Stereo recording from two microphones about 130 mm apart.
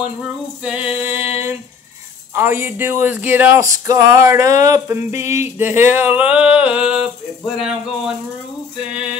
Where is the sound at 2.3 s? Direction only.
15° right (ahead or behind).